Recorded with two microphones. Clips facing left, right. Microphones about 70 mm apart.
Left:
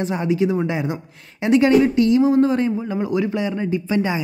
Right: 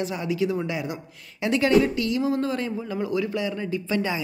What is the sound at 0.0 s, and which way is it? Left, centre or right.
Speech, left.